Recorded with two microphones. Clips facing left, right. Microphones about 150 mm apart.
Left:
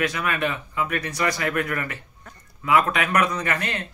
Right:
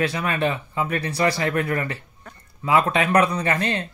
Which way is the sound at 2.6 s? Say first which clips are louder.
Right 1 dB; 30° right (ahead or behind).